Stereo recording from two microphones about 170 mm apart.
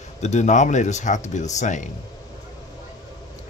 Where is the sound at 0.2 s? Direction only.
45° left (ahead or behind).